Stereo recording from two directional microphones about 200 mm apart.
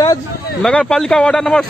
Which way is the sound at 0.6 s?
5° left (ahead or behind).